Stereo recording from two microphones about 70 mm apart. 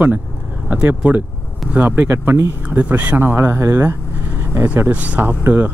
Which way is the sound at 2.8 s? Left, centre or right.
Right.